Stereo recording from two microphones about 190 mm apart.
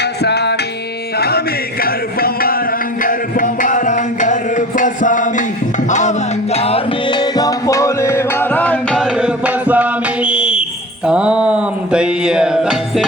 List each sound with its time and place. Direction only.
0.2 s music: 60° left (ahead or behind)
1.8 s music: 50° left (ahead or behind); by 9.0 s 5° left (ahead or behind)
9.2 s music: 10° right (ahead or behind)
10.2 s a sound: 5° right (ahead or behind)
11.0 s music: 5° right (ahead or behind)